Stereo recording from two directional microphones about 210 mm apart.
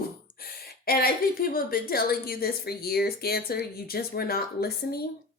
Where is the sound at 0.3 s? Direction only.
45° left (ahead or behind).